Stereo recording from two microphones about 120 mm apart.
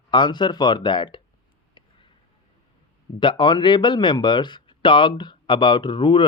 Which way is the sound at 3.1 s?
40° left (ahead or behind).